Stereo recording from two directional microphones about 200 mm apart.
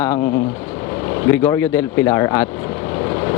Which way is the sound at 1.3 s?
15° left (ahead or behind).